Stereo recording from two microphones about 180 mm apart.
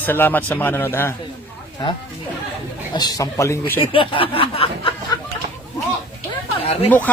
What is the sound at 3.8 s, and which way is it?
Speech, 30° left (ahead or behind).